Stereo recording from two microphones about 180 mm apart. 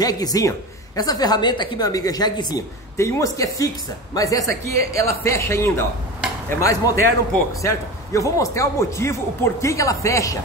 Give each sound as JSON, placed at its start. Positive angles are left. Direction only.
{"t": 0.0, "sound": "a woman's voice", "side_deg": 20}